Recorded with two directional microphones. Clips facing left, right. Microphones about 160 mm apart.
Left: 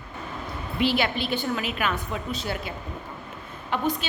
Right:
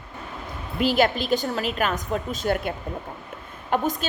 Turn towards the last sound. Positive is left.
turn(degrees=-45)  # may be behind; listen again after turning